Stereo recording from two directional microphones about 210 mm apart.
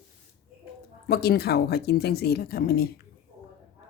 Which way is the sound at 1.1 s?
50° left (ahead or behind).